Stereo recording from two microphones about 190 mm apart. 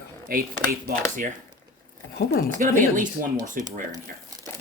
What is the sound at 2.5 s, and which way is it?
Speech, 45° right (ahead or behind).